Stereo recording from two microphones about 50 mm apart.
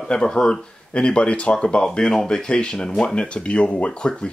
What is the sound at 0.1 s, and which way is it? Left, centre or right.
Speech, centre.